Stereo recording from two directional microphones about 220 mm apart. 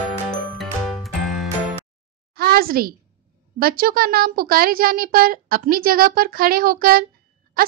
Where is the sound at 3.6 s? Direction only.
40° right (ahead or behind).